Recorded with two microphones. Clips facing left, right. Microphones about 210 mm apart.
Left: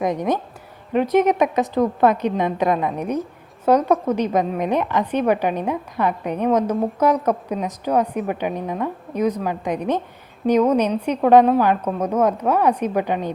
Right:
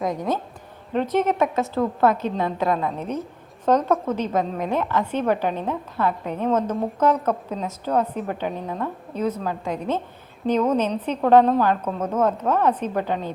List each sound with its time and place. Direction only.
0.0 s a woman's voice: 20° left (ahead or behind)